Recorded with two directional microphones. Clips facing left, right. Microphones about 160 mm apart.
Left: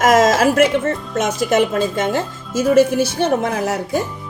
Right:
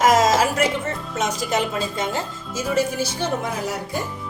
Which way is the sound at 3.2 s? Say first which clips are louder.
Left 7 dB; 65° left (ahead or behind).